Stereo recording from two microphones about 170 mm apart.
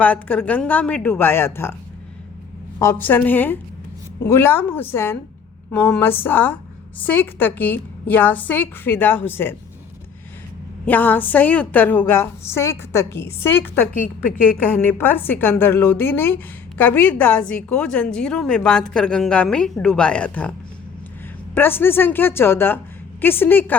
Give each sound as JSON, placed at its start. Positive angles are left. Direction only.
{"t": 0.0, "sound": "a woman's voice", "side_deg": 10}
{"t": 2.7, "sound": "a woman's voice", "side_deg": 15}
{"t": 10.8, "sound": "a woman's voice", "side_deg": 10}
{"t": 13.9, "sound": "a woman's voice", "side_deg": 50}
{"t": 14.6, "sound": "a woman's voice", "side_deg": 10}